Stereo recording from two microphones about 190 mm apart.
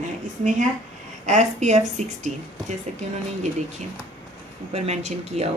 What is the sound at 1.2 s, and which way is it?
A woman's voice, 40° right (ahead or behind).